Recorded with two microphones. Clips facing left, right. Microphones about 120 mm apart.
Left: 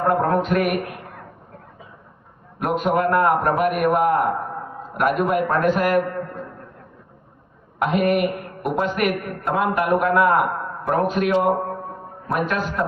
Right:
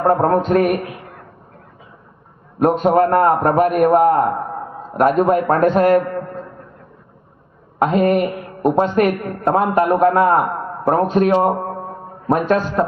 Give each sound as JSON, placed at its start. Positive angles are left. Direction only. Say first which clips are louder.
{"t": 0.1, "sound": "a woman's voice", "louder": "right 4 dB", "side_deg": -35}
{"t": 2.6, "sound": "a woman's voice", "louder": "right 7 dB", "side_deg": -30}
{"t": 7.8, "sound": "a woman's voice", "louder": "right 4 dB", "side_deg": -30}